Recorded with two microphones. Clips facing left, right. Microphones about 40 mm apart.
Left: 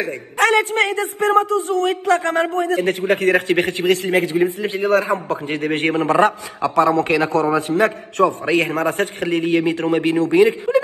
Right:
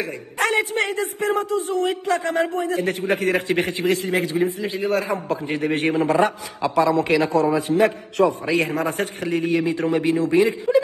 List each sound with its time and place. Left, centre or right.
0.0 s a man's voice: left